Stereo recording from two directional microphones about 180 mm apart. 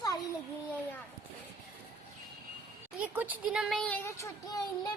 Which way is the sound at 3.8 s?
10° left (ahead or behind).